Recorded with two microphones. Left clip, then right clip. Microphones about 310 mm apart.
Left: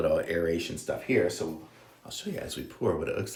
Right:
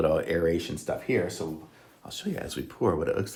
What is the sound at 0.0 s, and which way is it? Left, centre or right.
Speech, right.